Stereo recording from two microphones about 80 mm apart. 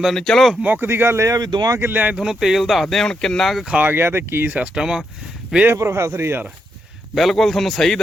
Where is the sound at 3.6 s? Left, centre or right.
Centre.